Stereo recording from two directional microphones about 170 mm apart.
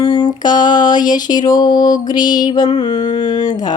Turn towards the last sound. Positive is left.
turn(degrees=25)  # may be behind; listen again after turning